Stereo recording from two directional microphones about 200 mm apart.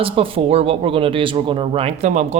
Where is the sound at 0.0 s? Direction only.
25° right (ahead or behind).